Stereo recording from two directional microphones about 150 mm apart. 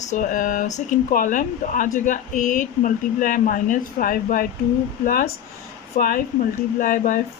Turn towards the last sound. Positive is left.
turn(degrees=65)  # may be behind; listen again after turning